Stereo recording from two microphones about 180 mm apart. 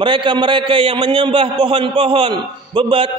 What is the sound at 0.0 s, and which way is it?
A man's voice, 25° right (ahead or behind).